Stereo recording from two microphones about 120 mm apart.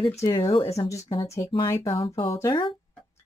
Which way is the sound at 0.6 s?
60° left (ahead or behind).